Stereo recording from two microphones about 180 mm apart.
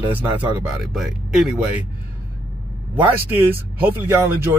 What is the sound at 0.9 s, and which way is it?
Speech, 5° right (ahead or behind).